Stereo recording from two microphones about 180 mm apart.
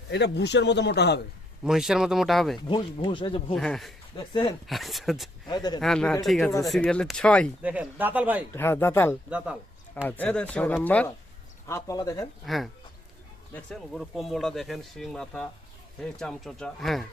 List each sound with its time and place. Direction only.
0.1 s speech: 70° left (ahead or behind)
1.6 s speech: 5° right (ahead or behind)
2.6 s speech: 25° left (ahead or behind)
3.5 s speech: 5° left (ahead or behind)
4.2 s speech: 25° left (ahead or behind)
4.6 s speech: centre (ahead or behind)
5.5 s speech: 20° left (ahead or behind)
5.8 s speech: 5° left (ahead or behind)
7.6 s speech: 5° right (ahead or behind)
8.5 s speech: 15° left (ahead or behind)
12.5 s speech: centre (ahead or behind)